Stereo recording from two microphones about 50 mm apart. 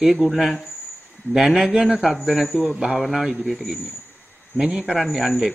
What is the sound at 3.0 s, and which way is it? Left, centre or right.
Speech, centre.